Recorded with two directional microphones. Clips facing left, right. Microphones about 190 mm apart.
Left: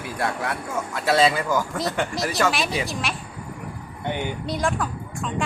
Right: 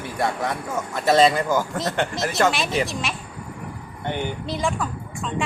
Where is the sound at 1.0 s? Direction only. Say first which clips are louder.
Right 3 dB; 10° left (ahead or behind).